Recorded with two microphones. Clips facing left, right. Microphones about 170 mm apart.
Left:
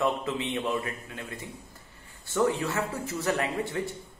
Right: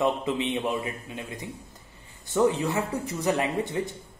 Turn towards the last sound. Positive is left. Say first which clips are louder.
# right 3 dB
turn(degrees=-20)  # may be behind; listen again after turning